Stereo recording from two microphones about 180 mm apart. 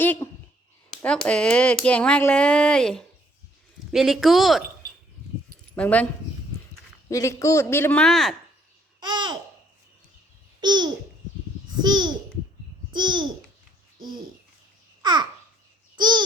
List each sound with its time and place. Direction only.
0.0 s a sound: 10° left (ahead or behind)
1.0 s speech: 5° left (ahead or behind)
5.7 s speech: 10° left (ahead or behind)
7.1 s a man's voice: 20° left (ahead or behind); by 8.4 s centre (ahead or behind)
9.0 s babbling: 25° right (ahead or behind)
10.6 s a child's voice: 25° right (ahead or behind)
15.0 s babbling: 25° right (ahead or behind)